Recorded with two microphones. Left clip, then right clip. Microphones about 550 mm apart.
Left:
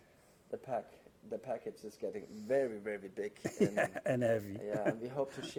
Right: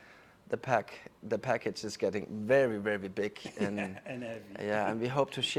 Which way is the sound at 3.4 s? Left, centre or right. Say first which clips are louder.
Left 3 dB; left.